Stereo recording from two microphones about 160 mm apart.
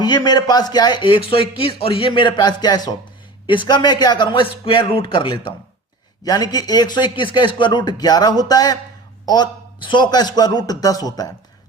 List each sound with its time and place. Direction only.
0.0 s a man's voice: 25° left (ahead or behind)